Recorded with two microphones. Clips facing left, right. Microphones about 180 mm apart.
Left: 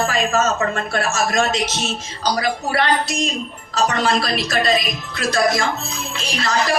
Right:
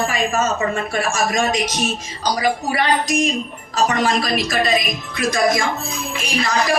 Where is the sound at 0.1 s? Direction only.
15° right (ahead or behind).